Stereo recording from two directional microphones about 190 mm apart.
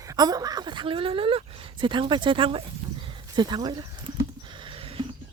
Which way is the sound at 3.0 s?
25° right (ahead or behind).